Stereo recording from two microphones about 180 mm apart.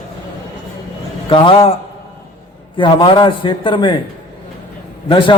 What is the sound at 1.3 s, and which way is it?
Speech, 30° left (ahead or behind).